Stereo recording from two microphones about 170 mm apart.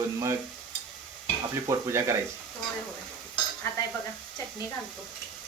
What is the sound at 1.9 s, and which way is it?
Speech, 15° right (ahead or behind).